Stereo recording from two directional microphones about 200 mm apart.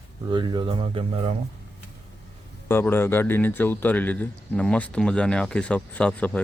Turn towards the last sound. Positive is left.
turn(degrees=5)  # may be behind; listen again after turning